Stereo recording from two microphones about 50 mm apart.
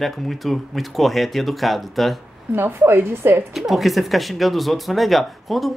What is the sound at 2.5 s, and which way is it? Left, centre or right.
Speech, right.